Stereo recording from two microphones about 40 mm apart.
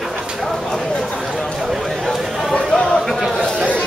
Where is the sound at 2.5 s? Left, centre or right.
Centre.